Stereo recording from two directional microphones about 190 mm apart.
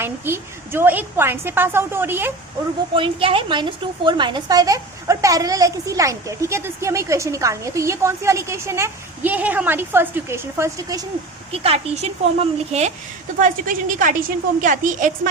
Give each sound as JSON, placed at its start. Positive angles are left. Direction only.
{"t": 0.0, "sound": "a woman's voice", "side_deg": -10}
{"t": 2.9, "sound": "a woman's voice", "side_deg": -25}
{"t": 11.5, "sound": "a woman's voice", "side_deg": -30}